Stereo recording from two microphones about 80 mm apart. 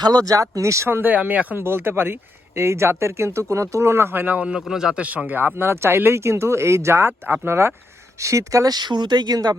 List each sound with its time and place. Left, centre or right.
0.0 s speech: right
8.2 s speech: right